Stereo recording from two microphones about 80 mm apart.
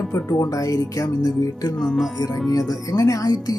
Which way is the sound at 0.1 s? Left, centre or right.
Left.